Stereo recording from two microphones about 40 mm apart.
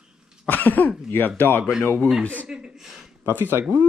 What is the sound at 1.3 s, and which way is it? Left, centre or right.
Speech, left.